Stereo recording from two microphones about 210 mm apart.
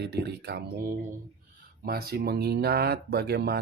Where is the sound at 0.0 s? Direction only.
50° right (ahead or behind).